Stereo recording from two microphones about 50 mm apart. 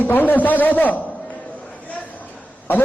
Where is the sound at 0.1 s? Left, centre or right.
Left.